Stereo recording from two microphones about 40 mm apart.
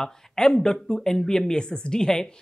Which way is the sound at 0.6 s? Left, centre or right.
Centre.